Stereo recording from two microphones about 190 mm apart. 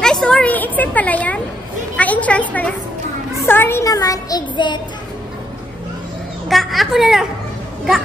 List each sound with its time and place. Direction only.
0.0 s speech: 5° left (ahead or behind)
2.0 s a sound: 5° left (ahead or behind)
3.4 s speech: 10° left (ahead or behind)
6.5 s speech: centre (ahead or behind)